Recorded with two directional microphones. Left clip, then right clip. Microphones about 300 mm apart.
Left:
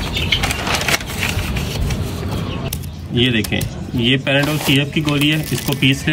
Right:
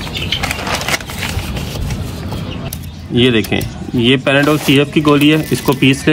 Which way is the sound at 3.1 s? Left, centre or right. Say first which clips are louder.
Right 5 dB; centre.